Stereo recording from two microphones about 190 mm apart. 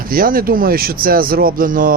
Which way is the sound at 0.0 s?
50° right (ahead or behind).